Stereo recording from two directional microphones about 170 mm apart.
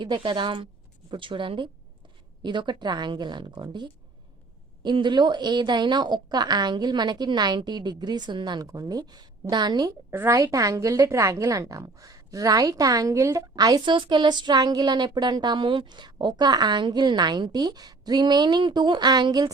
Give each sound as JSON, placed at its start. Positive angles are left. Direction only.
{"t": 0.0, "sound": "a woman's voice", "side_deg": -30}